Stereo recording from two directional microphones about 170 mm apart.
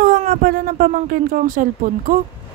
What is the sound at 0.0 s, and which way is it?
Speech, 55° right (ahead or behind).